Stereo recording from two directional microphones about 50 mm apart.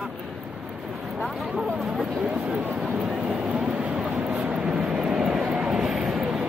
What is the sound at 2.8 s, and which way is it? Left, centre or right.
Vehicle, centre.